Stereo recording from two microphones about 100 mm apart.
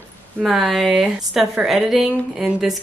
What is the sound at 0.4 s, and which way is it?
Speech, centre (ahead or behind).